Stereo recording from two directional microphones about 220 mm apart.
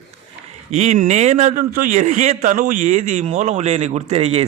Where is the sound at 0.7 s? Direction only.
30° right (ahead or behind).